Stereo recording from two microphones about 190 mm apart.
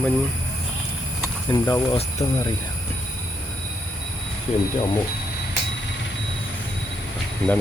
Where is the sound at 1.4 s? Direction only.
20° left (ahead or behind).